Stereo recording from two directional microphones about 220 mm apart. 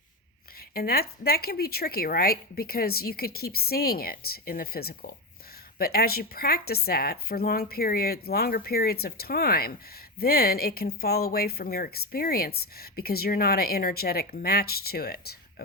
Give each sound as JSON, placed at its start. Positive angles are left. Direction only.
{"t": 0.7, "sound": "speech", "side_deg": 45}